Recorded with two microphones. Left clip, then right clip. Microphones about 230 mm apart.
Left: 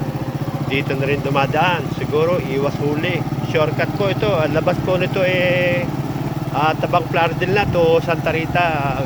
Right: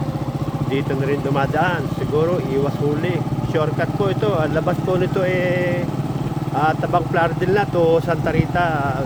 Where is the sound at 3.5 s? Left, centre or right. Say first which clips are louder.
Left 3 dB; centre.